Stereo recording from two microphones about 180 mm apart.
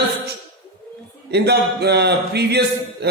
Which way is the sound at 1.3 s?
65° right (ahead or behind).